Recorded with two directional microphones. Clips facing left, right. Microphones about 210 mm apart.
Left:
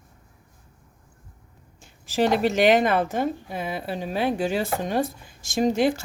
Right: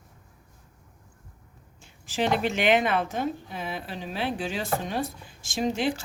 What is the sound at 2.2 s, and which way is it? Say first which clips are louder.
Speech: left 5 dB; 40° left (ahead or behind).